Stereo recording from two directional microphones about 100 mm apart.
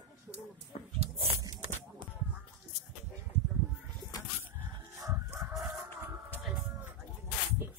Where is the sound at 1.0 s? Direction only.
90° right.